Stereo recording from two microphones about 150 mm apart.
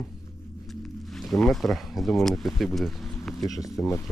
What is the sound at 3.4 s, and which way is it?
Speech, 25° left (ahead or behind).